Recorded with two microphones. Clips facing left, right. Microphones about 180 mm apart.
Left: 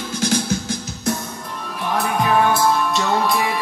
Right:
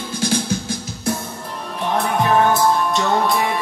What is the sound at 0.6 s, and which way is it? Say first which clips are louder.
Music: even; 30° right (ahead or behind).